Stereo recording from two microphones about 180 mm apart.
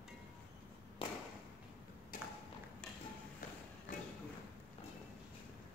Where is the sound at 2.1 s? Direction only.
50° left (ahead or behind).